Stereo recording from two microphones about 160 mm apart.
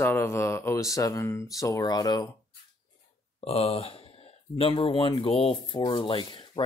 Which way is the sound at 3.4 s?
40° left (ahead or behind).